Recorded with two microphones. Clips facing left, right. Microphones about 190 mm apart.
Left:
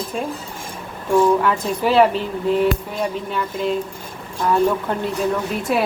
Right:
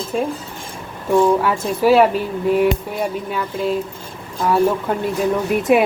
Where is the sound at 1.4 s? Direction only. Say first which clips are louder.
Right 3 dB; 10° right (ahead or behind).